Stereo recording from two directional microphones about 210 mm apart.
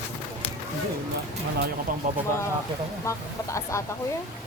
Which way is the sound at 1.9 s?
40° right (ahead or behind).